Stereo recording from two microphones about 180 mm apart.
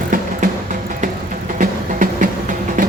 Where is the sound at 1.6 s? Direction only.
45° right (ahead or behind).